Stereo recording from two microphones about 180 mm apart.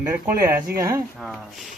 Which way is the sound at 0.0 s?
15° right (ahead or behind).